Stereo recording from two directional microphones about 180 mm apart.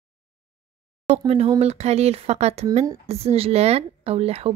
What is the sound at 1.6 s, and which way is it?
A woman's voice, 35° right (ahead or behind).